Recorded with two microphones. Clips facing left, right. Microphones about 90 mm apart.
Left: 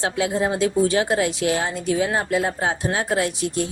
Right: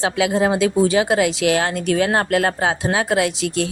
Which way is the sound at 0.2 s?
90° right.